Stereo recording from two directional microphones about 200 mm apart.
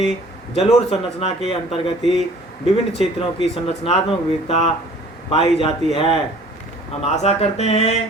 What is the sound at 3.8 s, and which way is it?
Speech, 30° left (ahead or behind).